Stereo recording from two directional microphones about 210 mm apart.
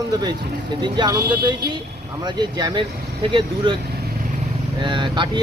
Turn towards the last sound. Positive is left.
turn(degrees=-20)  # may be behind; listen again after turning